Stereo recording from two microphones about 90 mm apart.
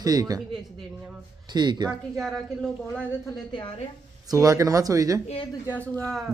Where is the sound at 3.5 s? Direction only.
65° left (ahead or behind).